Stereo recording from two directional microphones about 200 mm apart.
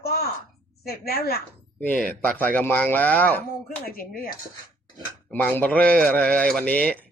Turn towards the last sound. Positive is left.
turn(degrees=5)  # may be behind; listen again after turning